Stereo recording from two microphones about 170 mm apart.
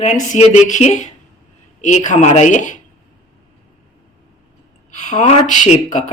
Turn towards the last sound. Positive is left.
turn(degrees=40)  # may be behind; listen again after turning